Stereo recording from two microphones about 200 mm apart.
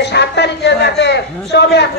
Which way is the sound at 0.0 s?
60° left (ahead or behind).